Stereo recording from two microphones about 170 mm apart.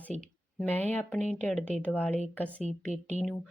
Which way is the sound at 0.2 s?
10° left (ahead or behind).